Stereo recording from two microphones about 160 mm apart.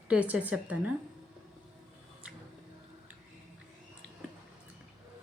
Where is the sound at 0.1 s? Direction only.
10° right (ahead or behind).